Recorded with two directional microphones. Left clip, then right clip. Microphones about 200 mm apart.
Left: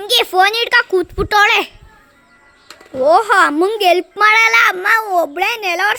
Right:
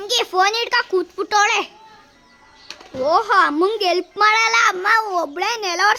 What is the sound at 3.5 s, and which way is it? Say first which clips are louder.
A child's voice: left 5 dB; 10° left (ahead or behind).